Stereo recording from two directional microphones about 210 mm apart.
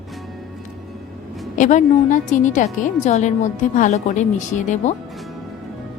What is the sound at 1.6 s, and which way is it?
A woman's voice, 35° left (ahead or behind).